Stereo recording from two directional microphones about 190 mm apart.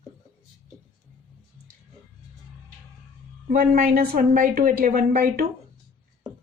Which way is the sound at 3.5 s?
50° right (ahead or behind).